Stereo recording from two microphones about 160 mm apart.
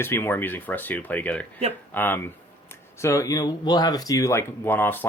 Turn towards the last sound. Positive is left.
turn(degrees=15)  # may be behind; listen again after turning